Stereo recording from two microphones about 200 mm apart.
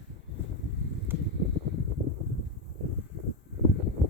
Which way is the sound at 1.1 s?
10° right (ahead or behind).